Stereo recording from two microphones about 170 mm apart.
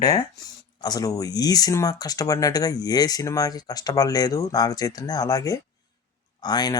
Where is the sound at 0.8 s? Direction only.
20° left (ahead or behind).